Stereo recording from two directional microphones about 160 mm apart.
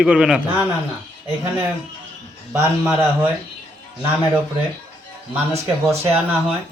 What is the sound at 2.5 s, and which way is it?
Speech, 10° right (ahead or behind).